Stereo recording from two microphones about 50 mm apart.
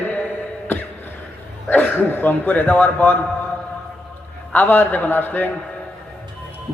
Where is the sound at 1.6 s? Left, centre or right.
Left.